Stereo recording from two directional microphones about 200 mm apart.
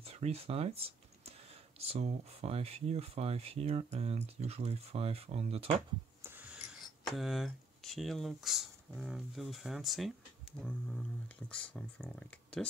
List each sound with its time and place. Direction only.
0.0 s speech: 30° right (ahead or behind)
6.2 s speech: 10° right (ahead or behind)